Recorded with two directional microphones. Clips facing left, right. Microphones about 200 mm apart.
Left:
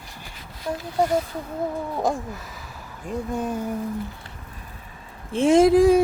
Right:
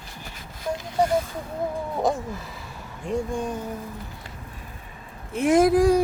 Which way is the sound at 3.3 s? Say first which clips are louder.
Left 2 dB; 5° left (ahead or behind).